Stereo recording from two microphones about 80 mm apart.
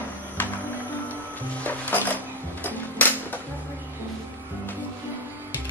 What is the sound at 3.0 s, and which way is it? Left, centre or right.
Music, left.